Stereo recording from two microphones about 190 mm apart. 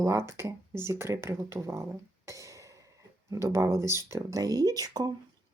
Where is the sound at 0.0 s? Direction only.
15° right (ahead or behind).